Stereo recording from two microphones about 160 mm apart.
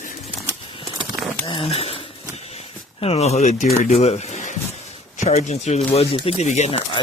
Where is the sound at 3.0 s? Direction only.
40° left (ahead or behind).